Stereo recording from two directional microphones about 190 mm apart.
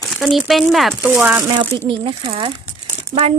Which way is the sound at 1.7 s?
25° right (ahead or behind).